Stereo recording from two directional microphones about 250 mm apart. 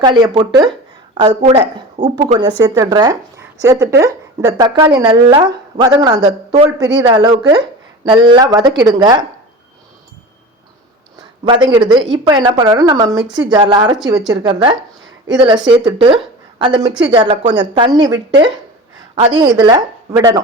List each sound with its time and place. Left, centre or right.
0.0 s speech: centre
11.4 s a woman's voice: centre